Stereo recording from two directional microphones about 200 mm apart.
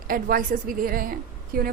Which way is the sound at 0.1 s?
45° right (ahead or behind).